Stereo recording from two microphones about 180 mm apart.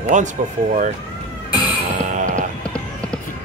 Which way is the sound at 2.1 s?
45° right (ahead or behind).